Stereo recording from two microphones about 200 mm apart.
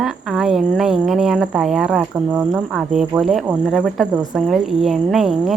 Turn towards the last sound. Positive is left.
turn(degrees=0)  # may be behind; listen again after turning